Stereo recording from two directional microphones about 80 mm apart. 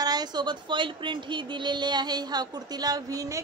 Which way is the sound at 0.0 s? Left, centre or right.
Right.